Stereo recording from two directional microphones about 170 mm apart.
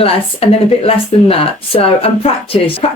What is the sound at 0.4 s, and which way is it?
Speech, 35° left (ahead or behind).